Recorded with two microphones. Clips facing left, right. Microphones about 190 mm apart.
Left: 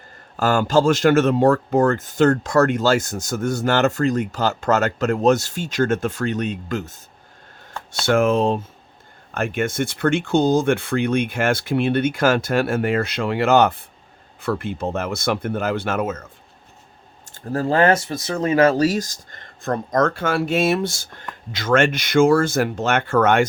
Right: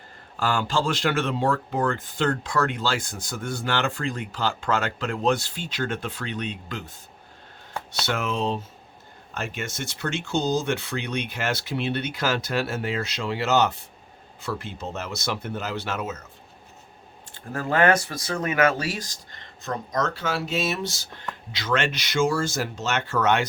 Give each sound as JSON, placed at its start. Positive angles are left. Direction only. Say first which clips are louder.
{"t": 0.3, "sound": "speech", "louder": "left 8 dB", "side_deg": 45}
{"t": 17.3, "sound": "speech", "louder": "left 5 dB", "side_deg": 35}